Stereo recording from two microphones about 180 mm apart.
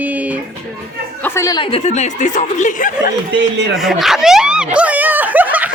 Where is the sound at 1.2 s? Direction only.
15° left (ahead or behind).